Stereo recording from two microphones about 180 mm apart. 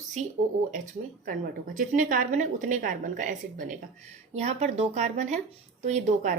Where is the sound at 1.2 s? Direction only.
50° right (ahead or behind).